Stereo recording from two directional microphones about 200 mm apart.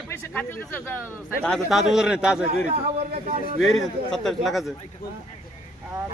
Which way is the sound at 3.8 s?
Centre (ahead or behind).